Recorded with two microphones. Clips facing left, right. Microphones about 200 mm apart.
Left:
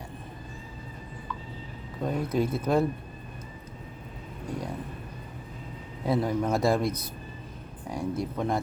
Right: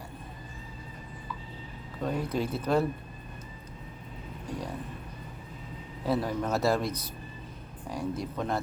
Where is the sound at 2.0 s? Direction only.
10° left (ahead or behind).